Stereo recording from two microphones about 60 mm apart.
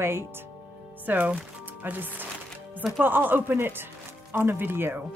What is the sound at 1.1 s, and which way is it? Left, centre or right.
Speech, right.